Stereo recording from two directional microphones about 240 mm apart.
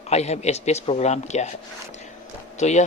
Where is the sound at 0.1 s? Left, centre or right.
Left.